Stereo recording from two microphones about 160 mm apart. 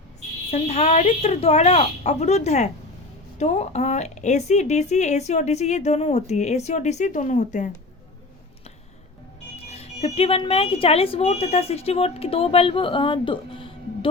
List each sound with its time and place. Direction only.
0.5 s speech: 45° left (ahead or behind)
9.6 s speech: 40° left (ahead or behind)